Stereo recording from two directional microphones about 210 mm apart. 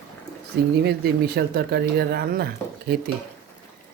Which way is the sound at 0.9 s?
50° right (ahead or behind).